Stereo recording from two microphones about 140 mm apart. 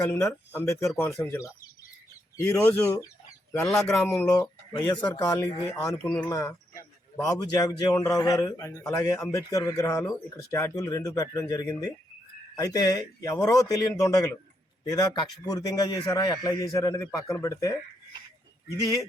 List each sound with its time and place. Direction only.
0.0 s a man's voice: 20° left (ahead or behind)
3.6 s speech: 5° left (ahead or behind)
4.0 s a man's voice: 20° left (ahead or behind)
4.9 s speech: 10° left (ahead or behind)
5.1 s a man's voice: 25° left (ahead or behind)
5.4 s speech: 15° left (ahead or behind)
6.1 s speech: 10° left (ahead or behind)
6.3 s a man's voice: 20° left (ahead or behind)